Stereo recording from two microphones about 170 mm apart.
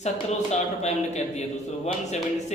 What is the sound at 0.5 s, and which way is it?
Speech, 40° left (ahead or behind).